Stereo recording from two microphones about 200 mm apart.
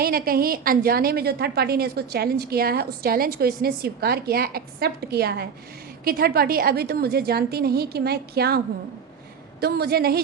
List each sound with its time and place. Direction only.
0.0 s a woman's voice: 50° right (ahead or behind)